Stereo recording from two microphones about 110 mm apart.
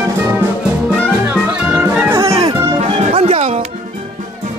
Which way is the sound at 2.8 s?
65° right (ahead or behind).